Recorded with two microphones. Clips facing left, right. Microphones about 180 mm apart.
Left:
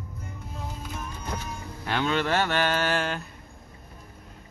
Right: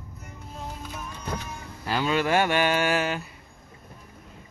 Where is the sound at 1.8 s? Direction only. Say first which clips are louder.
Right 1 dB; 5° right (ahead or behind).